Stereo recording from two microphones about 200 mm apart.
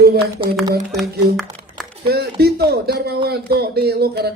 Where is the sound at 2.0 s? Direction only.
55° right (ahead or behind).